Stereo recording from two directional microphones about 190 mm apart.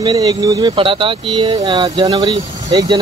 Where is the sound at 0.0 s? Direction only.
25° right (ahead or behind).